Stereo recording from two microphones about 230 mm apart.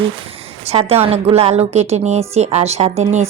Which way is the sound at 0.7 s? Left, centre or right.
Right.